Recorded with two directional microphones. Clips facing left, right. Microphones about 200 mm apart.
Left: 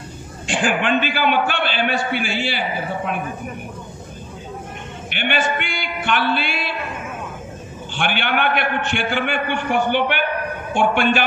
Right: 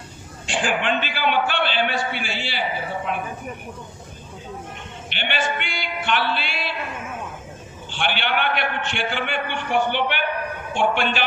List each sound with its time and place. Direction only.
0.4 s a man's voice: 50° left (ahead or behind)
5.0 s a man's voice: 50° left (ahead or behind)
7.9 s a man's voice: 50° left (ahead or behind)